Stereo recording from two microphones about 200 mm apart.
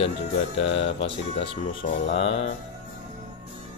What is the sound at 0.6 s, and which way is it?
Speech, 30° left (ahead or behind).